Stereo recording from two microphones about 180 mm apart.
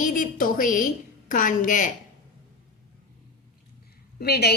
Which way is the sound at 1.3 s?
45° left (ahead or behind).